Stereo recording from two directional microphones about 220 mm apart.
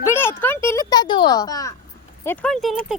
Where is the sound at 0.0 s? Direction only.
10° left (ahead or behind).